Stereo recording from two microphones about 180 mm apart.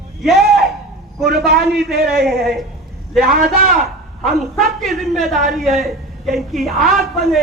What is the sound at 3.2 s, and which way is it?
Speech, 55° right (ahead or behind).